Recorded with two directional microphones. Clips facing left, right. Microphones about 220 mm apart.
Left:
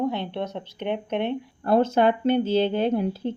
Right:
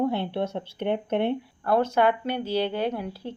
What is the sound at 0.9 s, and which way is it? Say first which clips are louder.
Speech: right 1 dB; 15° left (ahead or behind).